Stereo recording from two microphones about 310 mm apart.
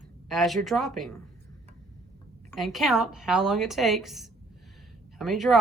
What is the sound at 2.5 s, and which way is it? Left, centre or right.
Speech, centre.